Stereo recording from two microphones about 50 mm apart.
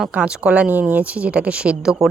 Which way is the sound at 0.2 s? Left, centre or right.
Centre.